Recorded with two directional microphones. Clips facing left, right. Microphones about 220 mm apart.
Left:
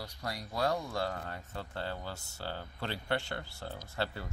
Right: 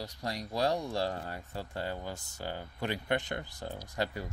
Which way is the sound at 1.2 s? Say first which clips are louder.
Right 2 dB; 10° right (ahead or behind).